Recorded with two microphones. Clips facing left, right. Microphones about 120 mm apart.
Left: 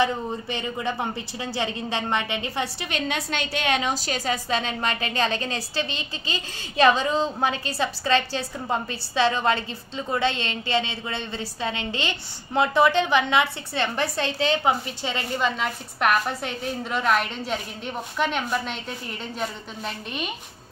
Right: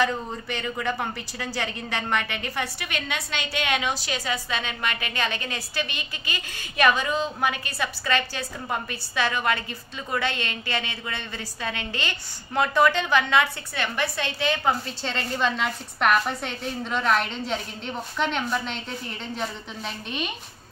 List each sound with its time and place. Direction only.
0.0 s a woman's voice: 20° left (ahead or behind)
14.6 s a woman's voice: 15° left (ahead or behind)